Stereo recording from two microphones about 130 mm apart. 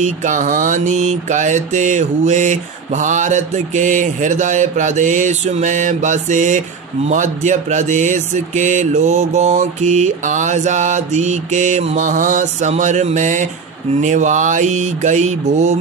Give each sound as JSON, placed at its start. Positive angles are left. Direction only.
{"t": 0.0, "sound": "mantra", "side_deg": -75}